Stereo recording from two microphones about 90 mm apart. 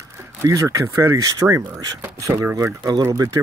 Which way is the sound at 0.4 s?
35° right (ahead or behind).